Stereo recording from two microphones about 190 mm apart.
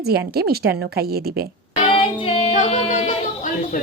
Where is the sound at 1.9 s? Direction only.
30° left (ahead or behind).